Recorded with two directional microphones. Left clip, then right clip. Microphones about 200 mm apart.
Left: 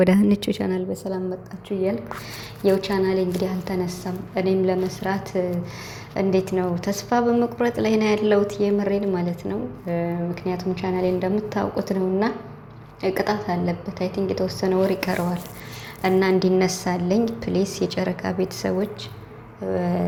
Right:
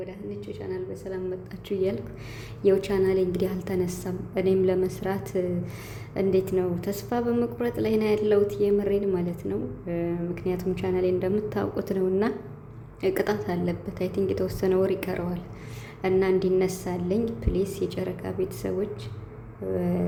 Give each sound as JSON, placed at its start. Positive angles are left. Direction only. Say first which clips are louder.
{"t": 0.0, "sound": "a woman's voice", "louder": "left 17 dB", "side_deg": 55}
{"t": 2.6, "sound": "a woman's voice", "louder": "left 2 dB", "side_deg": -10}